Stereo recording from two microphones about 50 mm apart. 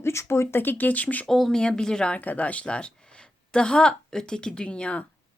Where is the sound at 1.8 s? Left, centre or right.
Centre.